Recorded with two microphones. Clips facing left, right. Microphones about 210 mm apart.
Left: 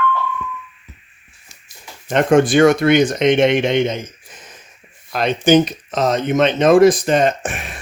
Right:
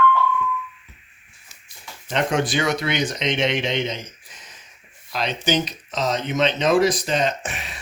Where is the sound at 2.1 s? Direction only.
50° left (ahead or behind).